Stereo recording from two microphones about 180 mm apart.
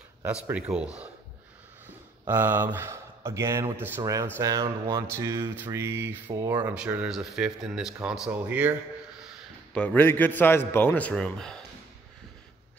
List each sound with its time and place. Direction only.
0.5 s speech: 5° right (ahead or behind)
2.2 s speech: 10° right (ahead or behind)
6.7 s speech: 5° right (ahead or behind)
9.8 s a man's voice: 10° left (ahead or behind)